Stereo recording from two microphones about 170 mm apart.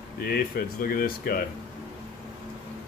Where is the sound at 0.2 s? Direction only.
60° left (ahead or behind).